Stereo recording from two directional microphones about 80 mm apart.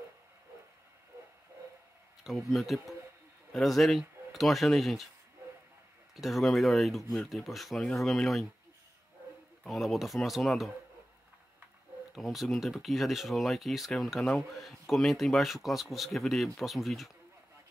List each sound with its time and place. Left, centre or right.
2.5 s speech: centre
6.1 s speech: centre
9.6 s speech: centre
12.2 s speech: centre